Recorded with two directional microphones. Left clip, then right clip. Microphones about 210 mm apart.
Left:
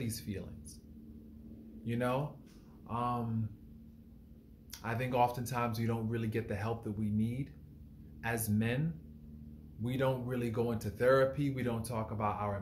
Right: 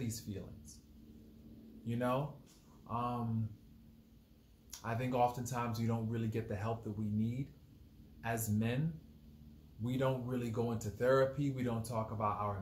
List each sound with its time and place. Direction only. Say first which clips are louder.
0.0 s speech: left 3 dB; 5° right (ahead or behind)
1.9 s speech: left 2 dB; 5° right (ahead or behind)
4.6 s speech: left 2 dB; 5° right (ahead or behind)
9.8 s speech: left 2 dB; 5° right (ahead or behind)